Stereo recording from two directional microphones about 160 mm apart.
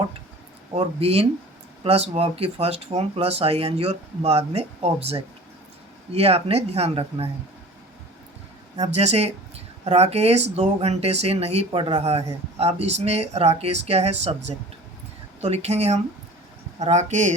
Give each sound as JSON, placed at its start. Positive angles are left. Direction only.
{"t": 0.8, "sound": "speech", "side_deg": -35}
{"t": 6.1, "sound": "speech", "side_deg": -40}
{"t": 9.0, "sound": "speech", "side_deg": -40}